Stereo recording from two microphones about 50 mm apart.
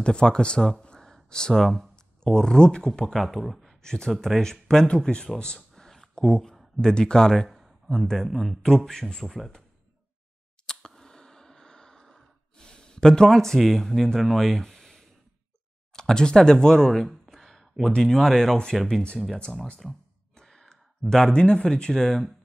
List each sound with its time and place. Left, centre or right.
0.0 s speech: centre
0.8 s a sound: centre
2.9 s speech: centre
3.8 s speech: centre
5.4 s a sound: centre
6.8 s speech: centre
11.0 s snort: centre
15.9 s speech: centre
17.3 s a sound: centre
18.1 s speech: centre
19.8 s speech: centre
20.3 s gasp: centre
21.1 s speech: centre